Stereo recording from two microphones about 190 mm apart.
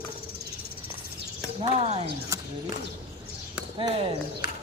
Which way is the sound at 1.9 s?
30° right (ahead or behind).